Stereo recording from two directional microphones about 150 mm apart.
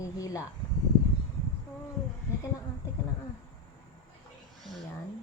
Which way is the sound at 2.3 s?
20° left (ahead or behind).